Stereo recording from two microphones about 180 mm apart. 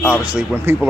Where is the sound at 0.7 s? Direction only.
15° right (ahead or behind).